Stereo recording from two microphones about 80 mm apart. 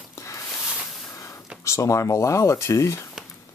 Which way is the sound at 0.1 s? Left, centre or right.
Left.